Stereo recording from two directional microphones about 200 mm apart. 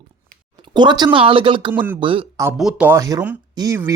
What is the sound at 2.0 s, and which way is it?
Speech, 25° right (ahead or behind).